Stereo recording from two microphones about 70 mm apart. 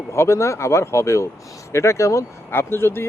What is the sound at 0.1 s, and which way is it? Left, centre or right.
Speech, left.